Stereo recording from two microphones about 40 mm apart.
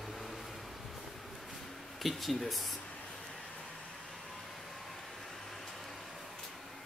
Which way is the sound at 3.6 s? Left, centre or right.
Centre.